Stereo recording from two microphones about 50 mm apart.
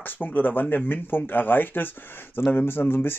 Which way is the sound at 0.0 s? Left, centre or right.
Left.